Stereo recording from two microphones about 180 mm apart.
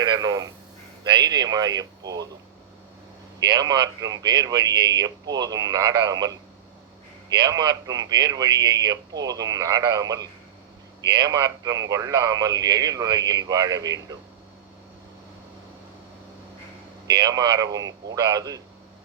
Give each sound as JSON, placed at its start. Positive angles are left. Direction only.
{"t": 0.0, "sound": "a man's voice", "side_deg": -25}
{"t": 3.4, "sound": "a man's voice", "side_deg": -20}
{"t": 7.3, "sound": "a man's voice", "side_deg": -25}
{"t": 17.1, "sound": "a man's voice", "side_deg": -25}